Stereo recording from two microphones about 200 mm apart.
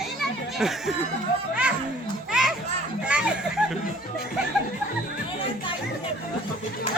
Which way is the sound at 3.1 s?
5° right (ahead or behind).